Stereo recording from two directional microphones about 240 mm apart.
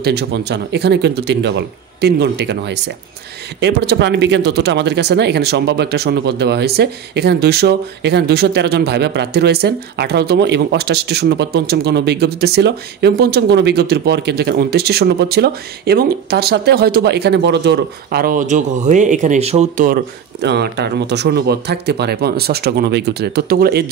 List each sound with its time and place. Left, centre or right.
0.0 s speech: right
20.4 s speech: right